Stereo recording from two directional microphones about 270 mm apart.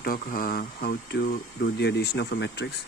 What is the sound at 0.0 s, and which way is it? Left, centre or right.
Speech, left.